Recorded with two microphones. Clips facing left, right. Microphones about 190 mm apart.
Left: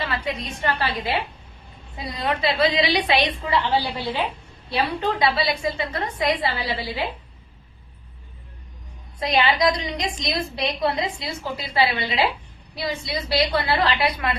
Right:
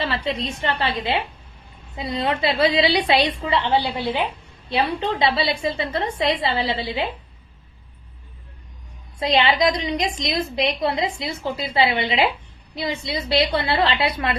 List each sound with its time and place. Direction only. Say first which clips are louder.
0.0 s a woman's voice: right 3 dB; 30° right (ahead or behind)
9.2 s a woman's voice: right 1 dB; 25° right (ahead or behind)